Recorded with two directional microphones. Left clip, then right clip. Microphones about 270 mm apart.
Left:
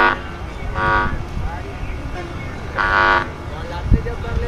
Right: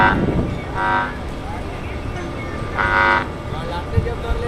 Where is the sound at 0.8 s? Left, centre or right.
Centre.